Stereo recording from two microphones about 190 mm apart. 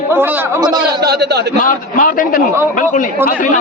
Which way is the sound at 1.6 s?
45° left (ahead or behind).